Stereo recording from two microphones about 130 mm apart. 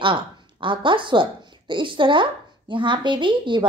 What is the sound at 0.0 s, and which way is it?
A woman's voice, 40° right (ahead or behind).